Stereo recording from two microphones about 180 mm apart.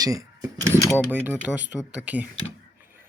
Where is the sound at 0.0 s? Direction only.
20° right (ahead or behind).